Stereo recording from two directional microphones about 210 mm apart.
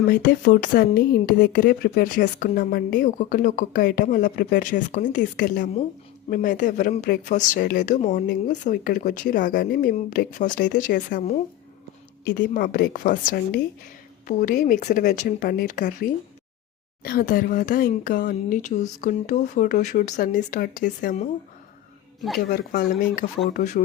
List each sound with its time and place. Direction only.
0.1 s speech: 40° left (ahead or behind)
12.5 s speech: 40° left (ahead or behind)
22.4 s speech: 40° left (ahead or behind)